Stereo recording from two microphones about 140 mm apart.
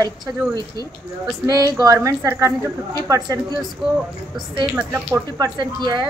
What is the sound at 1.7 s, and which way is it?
A woman's voice, 25° right (ahead or behind).